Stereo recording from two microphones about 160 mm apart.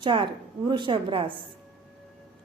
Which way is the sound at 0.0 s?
30° right (ahead or behind).